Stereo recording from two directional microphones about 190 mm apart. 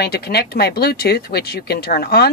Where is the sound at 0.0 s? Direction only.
55° left (ahead or behind).